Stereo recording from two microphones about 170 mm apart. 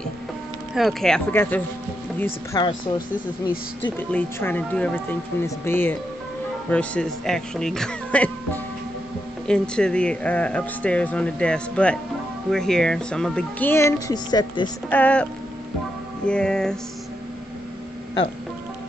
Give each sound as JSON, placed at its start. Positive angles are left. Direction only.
{"t": 0.7, "sound": "speech", "side_deg": 0}
{"t": 2.5, "sound": "speech", "side_deg": 25}
{"t": 4.1, "sound": "speech", "side_deg": 10}
{"t": 9.5, "sound": "speech", "side_deg": 5}
{"t": 14.9, "sound": "speech", "side_deg": 10}
{"t": 16.3, "sound": "speech", "side_deg": 5}